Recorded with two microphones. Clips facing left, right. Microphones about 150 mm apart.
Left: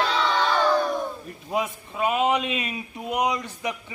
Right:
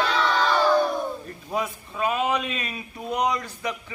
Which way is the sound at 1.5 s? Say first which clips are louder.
Left 1 dB; 15° left (ahead or behind).